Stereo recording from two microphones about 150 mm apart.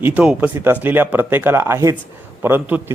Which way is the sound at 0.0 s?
10° right (ahead or behind).